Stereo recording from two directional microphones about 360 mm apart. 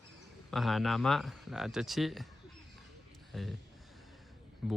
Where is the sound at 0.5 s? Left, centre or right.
Centre.